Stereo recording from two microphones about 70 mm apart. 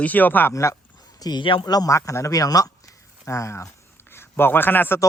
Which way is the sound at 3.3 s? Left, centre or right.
Left.